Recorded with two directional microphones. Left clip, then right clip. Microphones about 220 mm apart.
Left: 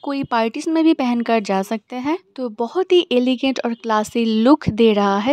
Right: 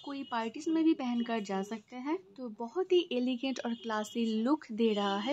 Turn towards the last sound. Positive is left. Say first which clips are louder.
# left 16 dB
turn(degrees=50)  # may be behind; listen again after turning